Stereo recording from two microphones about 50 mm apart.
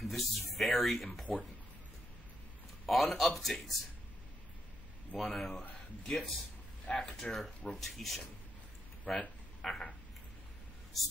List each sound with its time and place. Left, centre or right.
0.0 s speech: centre
2.9 s speech: centre
5.1 s speech: centre
7.2 s speech: centre
7.7 s speech: centre
9.1 s speech: left
9.6 s a sound: centre